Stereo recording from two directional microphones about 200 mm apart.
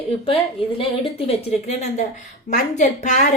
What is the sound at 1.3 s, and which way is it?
A woman's voice, 30° left (ahead or behind).